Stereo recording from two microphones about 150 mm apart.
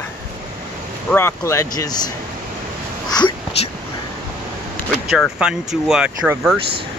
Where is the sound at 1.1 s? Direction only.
15° left (ahead or behind).